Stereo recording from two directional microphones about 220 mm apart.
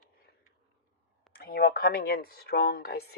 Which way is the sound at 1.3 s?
45° left (ahead or behind).